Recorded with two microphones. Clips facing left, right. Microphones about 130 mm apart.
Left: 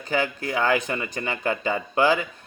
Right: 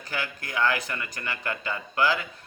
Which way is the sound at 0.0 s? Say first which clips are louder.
Left 9 dB; 20° left (ahead or behind).